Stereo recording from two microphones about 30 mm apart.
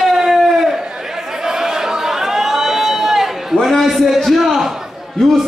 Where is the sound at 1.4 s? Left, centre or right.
Centre.